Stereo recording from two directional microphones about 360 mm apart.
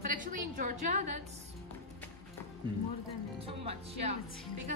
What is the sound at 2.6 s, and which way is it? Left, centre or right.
Speech, centre.